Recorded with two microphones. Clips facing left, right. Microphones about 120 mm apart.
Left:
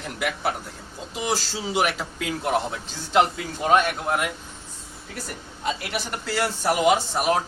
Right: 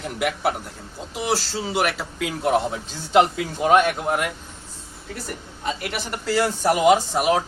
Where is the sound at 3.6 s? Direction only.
15° right (ahead or behind).